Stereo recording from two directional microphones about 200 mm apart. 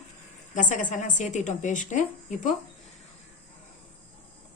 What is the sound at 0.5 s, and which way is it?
A woman's voice, 40° left (ahead or behind).